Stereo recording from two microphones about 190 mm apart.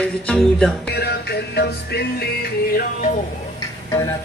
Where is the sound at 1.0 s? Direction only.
60° left (ahead or behind).